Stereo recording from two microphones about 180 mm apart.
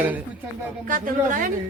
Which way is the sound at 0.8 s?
50° right (ahead or behind).